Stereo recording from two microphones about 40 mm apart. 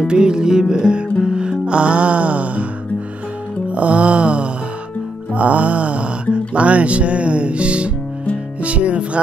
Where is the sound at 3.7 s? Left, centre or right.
Right.